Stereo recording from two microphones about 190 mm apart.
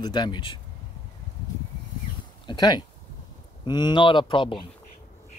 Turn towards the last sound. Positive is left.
turn(degrees=25)  # may be behind; listen again after turning